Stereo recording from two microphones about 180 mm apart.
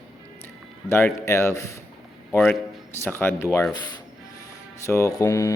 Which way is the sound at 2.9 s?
15° left (ahead or behind).